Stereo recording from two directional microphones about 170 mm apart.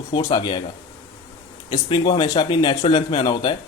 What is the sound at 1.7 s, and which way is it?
Speech, 30° left (ahead or behind).